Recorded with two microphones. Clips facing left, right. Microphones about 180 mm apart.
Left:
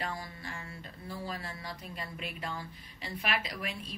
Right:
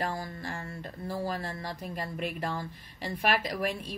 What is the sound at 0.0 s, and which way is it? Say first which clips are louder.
A woman's voice: right 5 dB; 45° right (ahead or behind).